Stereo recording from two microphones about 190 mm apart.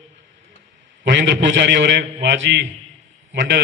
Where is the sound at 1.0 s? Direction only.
65° right (ahead or behind).